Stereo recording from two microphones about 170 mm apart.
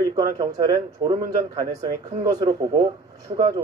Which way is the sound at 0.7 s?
35° right (ahead or behind).